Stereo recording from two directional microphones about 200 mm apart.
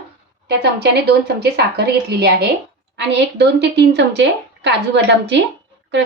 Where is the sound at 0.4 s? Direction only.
55° right (ahead or behind).